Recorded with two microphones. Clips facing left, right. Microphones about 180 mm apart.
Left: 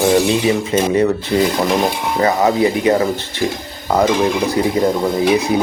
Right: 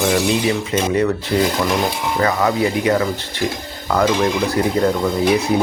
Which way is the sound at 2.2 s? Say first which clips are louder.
Left 4 dB; 25° left (ahead or behind).